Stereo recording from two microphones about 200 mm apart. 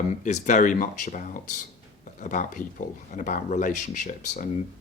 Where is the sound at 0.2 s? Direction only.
35° left (ahead or behind).